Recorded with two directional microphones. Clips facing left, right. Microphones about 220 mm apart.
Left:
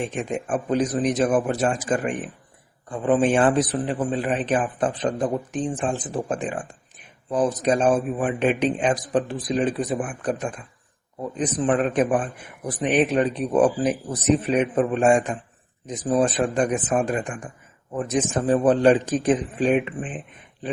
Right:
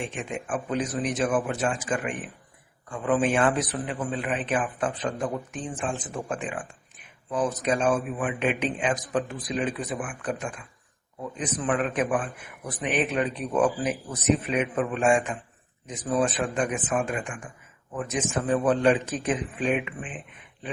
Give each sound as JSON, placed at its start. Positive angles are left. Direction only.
{"t": 0.0, "sound": "a man's voice", "side_deg": 40}